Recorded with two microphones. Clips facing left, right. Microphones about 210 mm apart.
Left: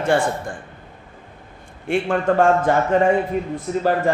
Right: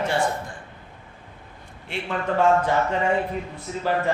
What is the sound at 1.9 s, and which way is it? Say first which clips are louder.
A man's voice: left 8 dB; 50° left (ahead or behind).